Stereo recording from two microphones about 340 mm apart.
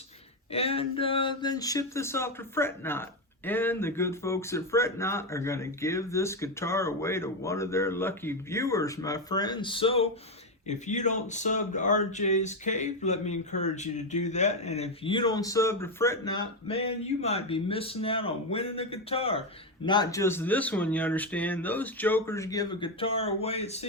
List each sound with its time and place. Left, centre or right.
0.5 s speech: centre